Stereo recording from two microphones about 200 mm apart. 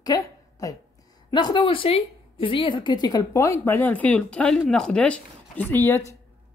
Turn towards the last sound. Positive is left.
turn(degrees=10)  # may be behind; listen again after turning